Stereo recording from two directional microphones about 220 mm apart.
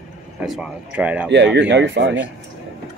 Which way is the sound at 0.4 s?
5° right (ahead or behind).